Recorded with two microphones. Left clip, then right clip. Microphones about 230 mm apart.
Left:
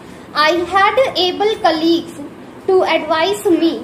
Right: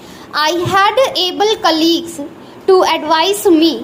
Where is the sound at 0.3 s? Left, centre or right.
Right.